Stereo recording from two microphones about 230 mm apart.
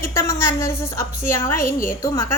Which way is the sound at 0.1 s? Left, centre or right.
Centre.